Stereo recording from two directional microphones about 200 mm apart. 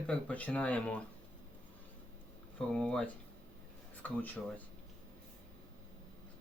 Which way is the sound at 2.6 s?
5° left (ahead or behind).